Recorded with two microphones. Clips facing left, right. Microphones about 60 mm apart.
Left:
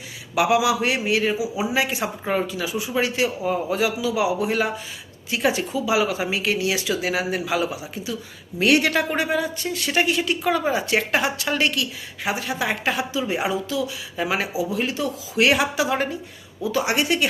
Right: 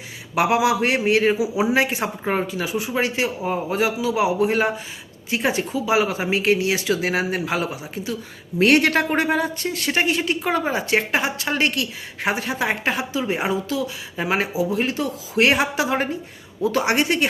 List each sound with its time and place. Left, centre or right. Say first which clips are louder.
0.3 s a woman's voice: right 1 dB; right